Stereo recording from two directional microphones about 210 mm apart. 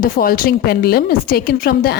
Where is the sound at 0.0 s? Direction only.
45° left (ahead or behind).